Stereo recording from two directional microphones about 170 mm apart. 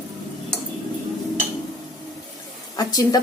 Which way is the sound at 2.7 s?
25° left (ahead or behind).